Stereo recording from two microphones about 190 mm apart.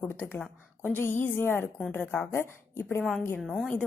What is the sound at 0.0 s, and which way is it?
A woman's voice, 10° left (ahead or behind).